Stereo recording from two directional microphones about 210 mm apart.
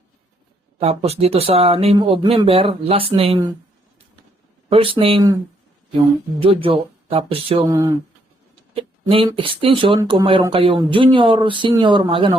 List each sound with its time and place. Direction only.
0.8 s speech: 30° right (ahead or behind)
4.7 s speech: 25° right (ahead or behind)
6.4 s speech: 25° right (ahead or behind)